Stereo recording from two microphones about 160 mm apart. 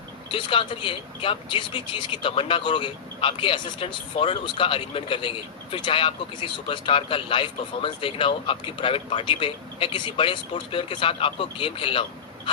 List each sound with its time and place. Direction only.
0.3 s speech: 30° left (ahead or behind)